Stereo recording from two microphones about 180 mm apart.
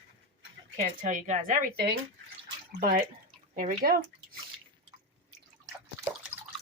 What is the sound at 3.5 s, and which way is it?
Speech, 50° right (ahead or behind).